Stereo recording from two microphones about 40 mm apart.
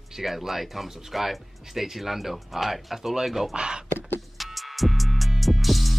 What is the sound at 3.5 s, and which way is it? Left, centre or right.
Speech, right.